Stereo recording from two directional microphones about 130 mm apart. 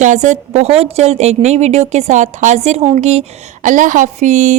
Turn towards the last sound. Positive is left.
turn(degrees=-65)  # may be behind; listen again after turning